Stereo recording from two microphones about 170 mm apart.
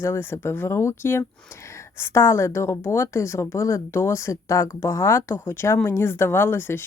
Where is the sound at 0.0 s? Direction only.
15° left (ahead or behind).